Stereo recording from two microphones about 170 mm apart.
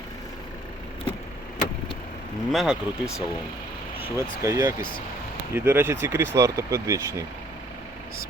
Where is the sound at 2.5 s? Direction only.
5° right (ahead or behind).